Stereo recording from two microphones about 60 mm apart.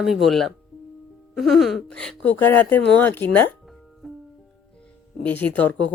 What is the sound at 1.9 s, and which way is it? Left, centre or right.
Speech, centre.